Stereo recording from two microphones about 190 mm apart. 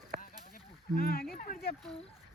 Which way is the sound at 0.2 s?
50° left (ahead or behind).